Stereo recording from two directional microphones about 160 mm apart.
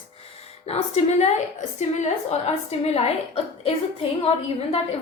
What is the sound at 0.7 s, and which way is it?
Speech, 45° left (ahead or behind).